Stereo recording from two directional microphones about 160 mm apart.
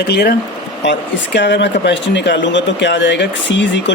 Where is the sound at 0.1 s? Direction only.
90° left.